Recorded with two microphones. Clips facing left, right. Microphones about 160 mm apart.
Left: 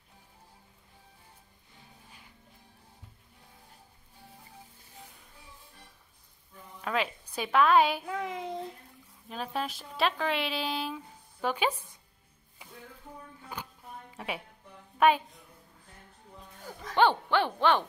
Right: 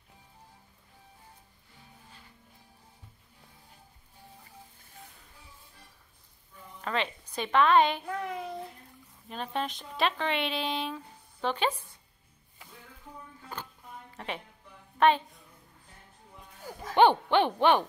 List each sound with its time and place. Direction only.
6.8 s a child's voice: 5° left (ahead or behind)
9.3 s a woman's voice: 5° left (ahead or behind)
14.1 s a sound: 10° left (ahead or behind)
15.0 s speech: 10° left (ahead or behind)
16.9 s hoot: 15° right (ahead or behind)